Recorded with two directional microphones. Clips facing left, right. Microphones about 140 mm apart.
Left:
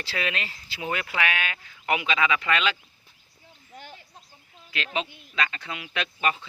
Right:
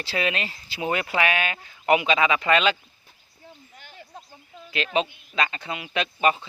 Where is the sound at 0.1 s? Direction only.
25° right (ahead or behind).